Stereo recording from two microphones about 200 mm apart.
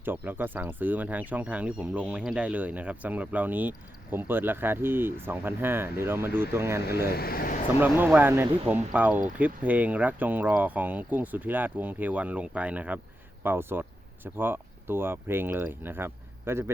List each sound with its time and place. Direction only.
0.0 s speech: 10° right (ahead or behind)
7.1 s speech: 50° left (ahead or behind)
7.8 s speech: 10° right (ahead or behind)